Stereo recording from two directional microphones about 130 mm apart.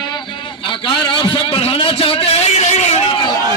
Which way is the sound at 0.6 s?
40° left (ahead or behind).